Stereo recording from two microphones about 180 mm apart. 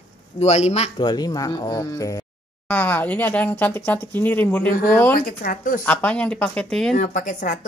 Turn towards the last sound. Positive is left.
turn(degrees=45)  # may be behind; listen again after turning